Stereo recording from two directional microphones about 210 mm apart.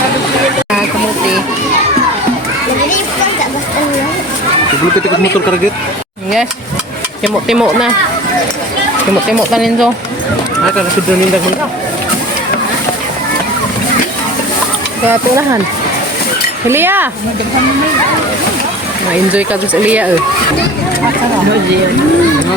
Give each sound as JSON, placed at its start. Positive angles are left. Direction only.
{"t": 7.4, "sound": "speech", "side_deg": -5}
{"t": 9.5, "sound": "speech", "side_deg": 0}
{"t": 16.6, "sound": "speech", "side_deg": -10}
{"t": 19.1, "sound": "speech", "side_deg": -5}